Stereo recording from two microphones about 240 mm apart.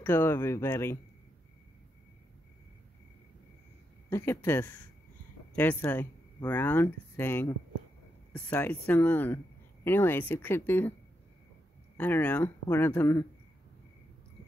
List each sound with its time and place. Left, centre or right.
0.0 s speech: centre
4.1 s speech: centre
12.0 s speech: centre